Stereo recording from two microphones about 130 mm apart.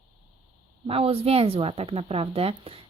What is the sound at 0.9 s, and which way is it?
Speech, 50° right (ahead or behind).